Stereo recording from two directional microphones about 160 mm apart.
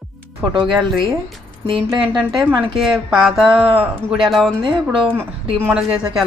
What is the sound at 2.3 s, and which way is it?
A woman's voice, centre (ahead or behind).